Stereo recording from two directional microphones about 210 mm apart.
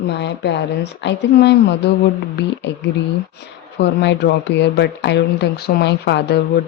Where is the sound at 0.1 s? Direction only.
55° left (ahead or behind).